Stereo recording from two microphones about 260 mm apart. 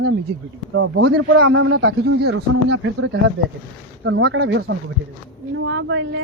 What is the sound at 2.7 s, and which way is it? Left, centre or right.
Speech, right.